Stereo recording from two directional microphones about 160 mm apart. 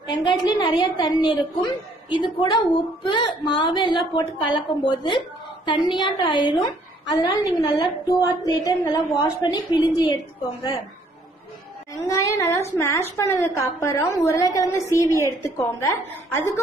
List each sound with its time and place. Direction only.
0.2 s a woman's voice: 30° left (ahead or behind)
11.9 s a woman's voice: 20° left (ahead or behind)